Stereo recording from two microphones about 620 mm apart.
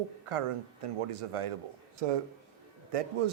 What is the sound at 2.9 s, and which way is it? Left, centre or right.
Speech, right.